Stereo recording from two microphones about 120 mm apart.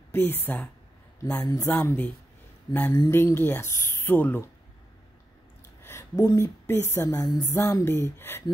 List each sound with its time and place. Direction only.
0.1 s speech: 15° left (ahead or behind)
1.4 s speech: 30° left (ahead or behind)
1.7 s speech: 15° left (ahead or behind)
2.7 s speech: 30° left (ahead or behind)
5.8 s a sound: 20° left (ahead or behind)
6.1 s speech: 30° left (ahead or behind)